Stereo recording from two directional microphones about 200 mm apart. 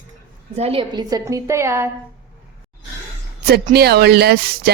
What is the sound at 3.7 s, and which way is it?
Speech, 55° right (ahead or behind).